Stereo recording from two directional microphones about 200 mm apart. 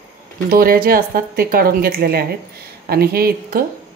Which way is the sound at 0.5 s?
50° right (ahead or behind).